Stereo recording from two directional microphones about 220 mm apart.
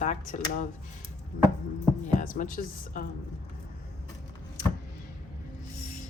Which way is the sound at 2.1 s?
35° left (ahead or behind).